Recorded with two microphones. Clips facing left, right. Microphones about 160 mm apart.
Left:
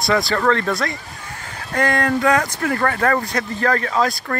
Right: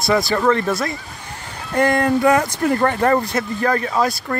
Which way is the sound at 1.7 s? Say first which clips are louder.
Right 3 dB; 10° right (ahead or behind).